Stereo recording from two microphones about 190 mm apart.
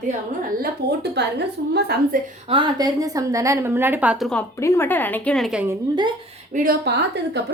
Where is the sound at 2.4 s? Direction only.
25° right (ahead or behind); by 4.4 s centre (ahead or behind).